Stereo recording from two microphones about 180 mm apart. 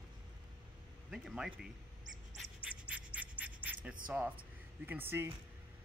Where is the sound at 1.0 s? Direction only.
Centre (ahead or behind).